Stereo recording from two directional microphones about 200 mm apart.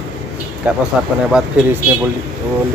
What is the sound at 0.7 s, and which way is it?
Speech, 5° right (ahead or behind).